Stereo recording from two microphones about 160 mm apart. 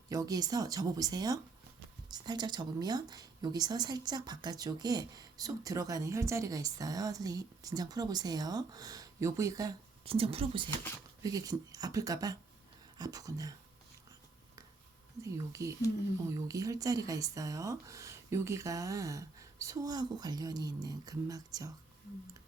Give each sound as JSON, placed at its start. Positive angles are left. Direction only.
{"t": 0.1, "sound": "speech", "side_deg": -25}
{"t": 10.0, "sound": "a woman's voice", "side_deg": -35}
{"t": 11.2, "sound": "speech", "side_deg": -20}
{"t": 15.2, "sound": "speech", "side_deg": -20}